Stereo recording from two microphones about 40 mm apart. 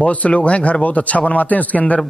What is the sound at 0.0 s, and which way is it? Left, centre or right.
Speech, left.